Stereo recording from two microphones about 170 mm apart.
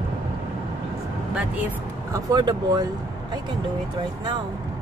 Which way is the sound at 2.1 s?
20° right (ahead or behind).